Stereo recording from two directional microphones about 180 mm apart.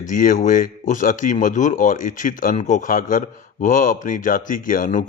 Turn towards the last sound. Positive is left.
turn(degrees=45)  # may be behind; listen again after turning